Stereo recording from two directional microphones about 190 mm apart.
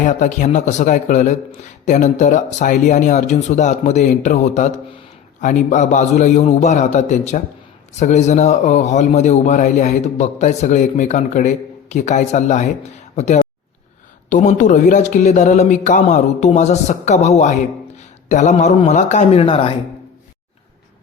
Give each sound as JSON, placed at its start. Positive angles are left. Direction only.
{"t": 0.0, "sound": "a man's voice", "side_deg": 40}